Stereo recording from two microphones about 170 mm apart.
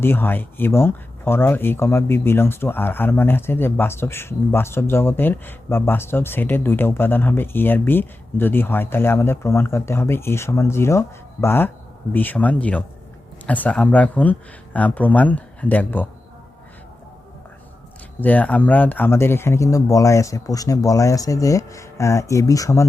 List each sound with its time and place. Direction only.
0.0 s speech: 15° left (ahead or behind)
18.2 s speech: 10° left (ahead or behind)